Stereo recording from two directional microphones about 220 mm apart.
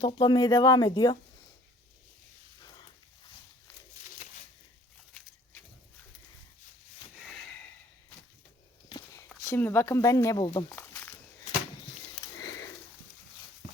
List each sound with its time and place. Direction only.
0.0 s speech: 20° left (ahead or behind)
2.6 s a sound: 20° left (ahead or behind)
8.9 s walk: 20° left (ahead or behind)
9.3 s speech: 10° left (ahead or behind)
12.4 s sniff: 15° left (ahead or behind)